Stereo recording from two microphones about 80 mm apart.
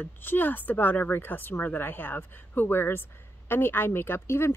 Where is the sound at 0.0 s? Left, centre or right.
Left.